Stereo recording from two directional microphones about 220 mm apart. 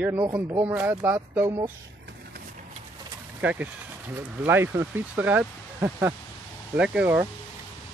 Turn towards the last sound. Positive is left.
turn(degrees=-5)  # may be behind; listen again after turning